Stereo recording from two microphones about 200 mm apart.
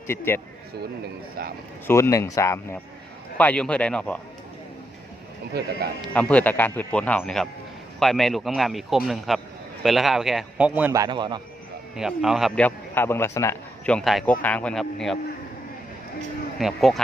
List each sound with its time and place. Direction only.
0.1 s speech: 10° left (ahead or behind)
1.4 s speech: 50° right (ahead or behind)
1.9 s a man's voice: 15° left (ahead or behind)
5.5 s speech: 55° right (ahead or behind)
6.0 s a man's voice: 5° left (ahead or behind); by 11.4 s 20° right (ahead or behind)
11.9 s a man's voice: 5° right (ahead or behind)
16.6 s a man's voice: centre (ahead or behind)